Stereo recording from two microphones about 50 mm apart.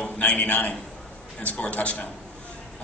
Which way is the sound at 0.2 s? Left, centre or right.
Left.